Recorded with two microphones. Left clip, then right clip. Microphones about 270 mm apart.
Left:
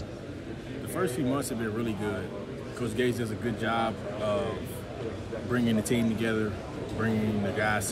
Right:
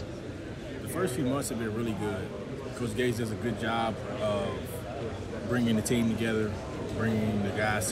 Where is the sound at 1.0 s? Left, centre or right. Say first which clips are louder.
Left 1 dB; centre.